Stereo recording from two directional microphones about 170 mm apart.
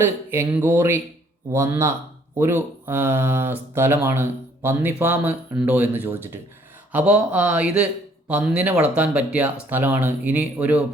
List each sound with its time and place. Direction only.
0.0 s speech: 15° right (ahead or behind)